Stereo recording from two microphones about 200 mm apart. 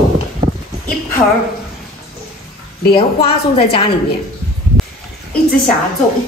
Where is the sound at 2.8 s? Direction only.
30° left (ahead or behind).